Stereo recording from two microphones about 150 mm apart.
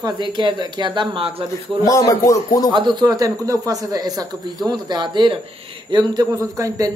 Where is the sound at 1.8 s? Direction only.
25° left (ahead or behind).